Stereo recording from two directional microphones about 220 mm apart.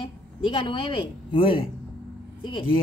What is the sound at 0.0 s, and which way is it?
A woman's voice, 20° left (ahead or behind).